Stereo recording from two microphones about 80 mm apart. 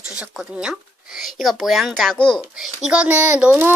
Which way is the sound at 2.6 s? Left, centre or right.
Centre.